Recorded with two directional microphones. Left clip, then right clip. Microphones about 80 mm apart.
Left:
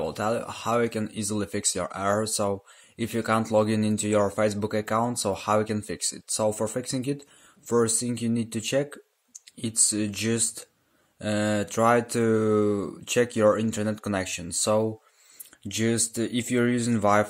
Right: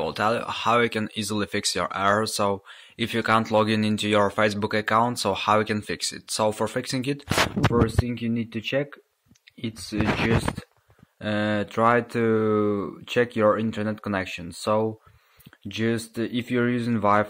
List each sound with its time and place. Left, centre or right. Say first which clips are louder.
0.0 s speech: right 3 dB; left
7.8 s speech: even; left
11.1 s speech: right 1 dB; left